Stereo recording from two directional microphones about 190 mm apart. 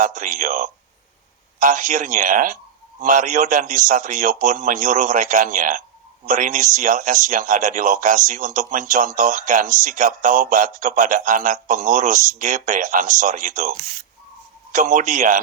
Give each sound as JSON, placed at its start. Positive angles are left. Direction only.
{"t": 0.0, "sound": "speech", "side_deg": -40}